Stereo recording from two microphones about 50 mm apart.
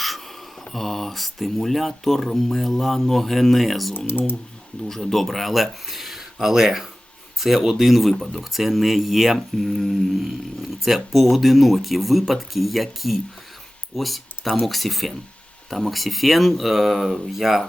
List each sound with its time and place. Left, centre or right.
0.6 s speech: centre